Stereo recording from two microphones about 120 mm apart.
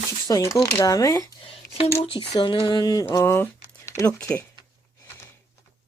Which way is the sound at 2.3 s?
40° left (ahead or behind).